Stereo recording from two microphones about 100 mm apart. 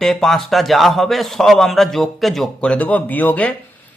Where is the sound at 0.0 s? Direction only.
Centre (ahead or behind).